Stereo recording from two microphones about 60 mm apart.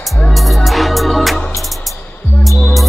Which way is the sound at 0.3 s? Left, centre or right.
Centre.